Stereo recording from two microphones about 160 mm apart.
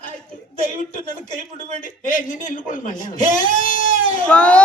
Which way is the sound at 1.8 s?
55° left (ahead or behind).